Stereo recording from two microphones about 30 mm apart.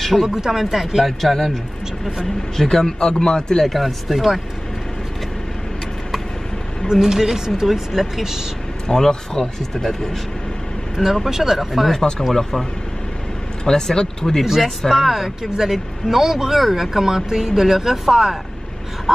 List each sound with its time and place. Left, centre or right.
0.0 s speech: centre
0.3 s speech: centre
1.0 s speech: centre; by 3.6 s left
3.6 s speech: centre
6.9 s speech: centre
8.8 s speech: centre
11.2 s speech: centre
13.7 s speech: left
14.6 s speech: centre
17.0 s speech: centre